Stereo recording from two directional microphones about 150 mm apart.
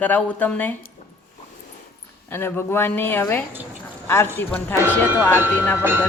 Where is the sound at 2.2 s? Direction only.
15° left (ahead or behind).